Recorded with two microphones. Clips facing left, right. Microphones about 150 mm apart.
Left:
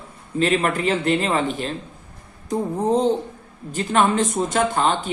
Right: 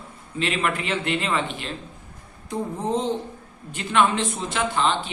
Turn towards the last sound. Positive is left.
turn(degrees=45)  # may be behind; listen again after turning